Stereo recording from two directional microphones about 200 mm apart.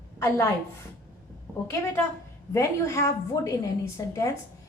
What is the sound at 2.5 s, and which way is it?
A woman's voice, 15° left (ahead or behind).